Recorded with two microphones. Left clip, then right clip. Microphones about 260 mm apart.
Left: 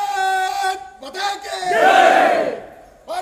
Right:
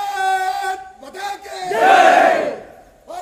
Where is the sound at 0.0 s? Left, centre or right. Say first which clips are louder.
Even; centre.